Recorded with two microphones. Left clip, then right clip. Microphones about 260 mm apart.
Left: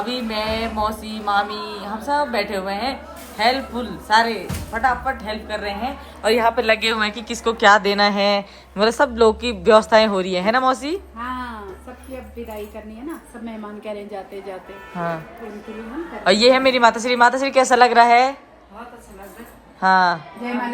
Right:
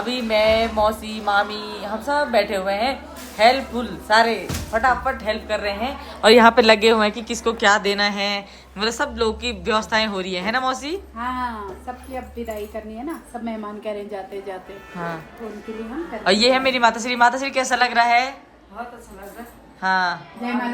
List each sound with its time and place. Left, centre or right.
0.0 s speech: centre
6.2 s a woman's voice: right
6.7 s speech: right; by 11.5 s centre
13.4 s speech: centre
16.2 s speech: centre
19.8 s speech: centre